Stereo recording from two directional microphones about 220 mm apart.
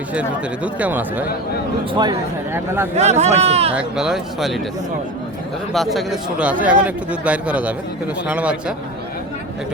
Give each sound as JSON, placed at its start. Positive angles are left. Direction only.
{"t": 0.1, "sound": "speech", "side_deg": -5}
{"t": 1.9, "sound": "speech", "side_deg": -20}
{"t": 2.9, "sound": "speech", "side_deg": -30}
{"t": 3.8, "sound": "speech", "side_deg": -5}
{"t": 5.7, "sound": "speech", "side_deg": 0}